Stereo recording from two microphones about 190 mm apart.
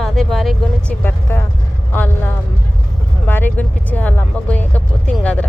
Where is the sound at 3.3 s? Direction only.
10° left (ahead or behind).